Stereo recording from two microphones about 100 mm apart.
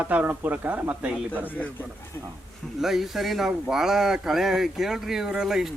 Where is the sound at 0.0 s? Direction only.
15° right (ahead or behind).